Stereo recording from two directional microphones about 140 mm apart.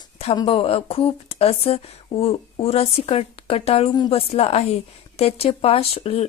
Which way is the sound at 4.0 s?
30° left (ahead or behind).